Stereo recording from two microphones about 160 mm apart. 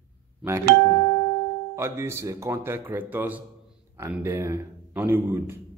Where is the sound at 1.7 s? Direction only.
15° right (ahead or behind).